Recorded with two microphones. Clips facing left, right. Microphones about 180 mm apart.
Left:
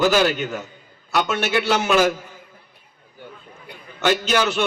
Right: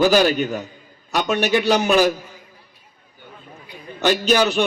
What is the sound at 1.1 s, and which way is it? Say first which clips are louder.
Speech: right 2 dB; 15° right (ahead or behind).